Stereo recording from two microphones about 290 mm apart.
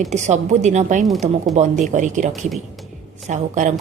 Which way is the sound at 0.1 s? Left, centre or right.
Right.